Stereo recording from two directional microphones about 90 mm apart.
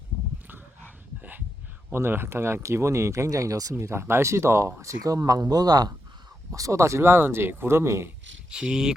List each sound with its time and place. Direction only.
0.4 s dog: 20° right (ahead or behind)
1.9 s speech: 25° right (ahead or behind); by 5.9 s 50° right (ahead or behind)
6.5 s speech: 35° right (ahead or behind)
8.4 s speech: 10° right (ahead or behind)